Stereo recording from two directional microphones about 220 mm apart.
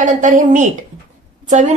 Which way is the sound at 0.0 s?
35° right (ahead or behind).